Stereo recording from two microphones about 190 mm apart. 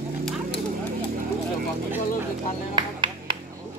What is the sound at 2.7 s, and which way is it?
Music, 25° right (ahead or behind).